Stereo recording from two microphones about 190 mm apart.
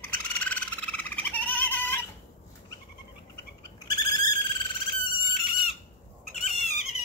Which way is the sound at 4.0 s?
20° left (ahead or behind).